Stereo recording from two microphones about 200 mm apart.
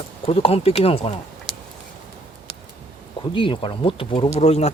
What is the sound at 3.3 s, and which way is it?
Speech, 25° left (ahead or behind).